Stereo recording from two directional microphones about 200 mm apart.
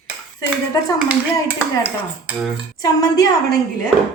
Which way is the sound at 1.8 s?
10° right (ahead or behind).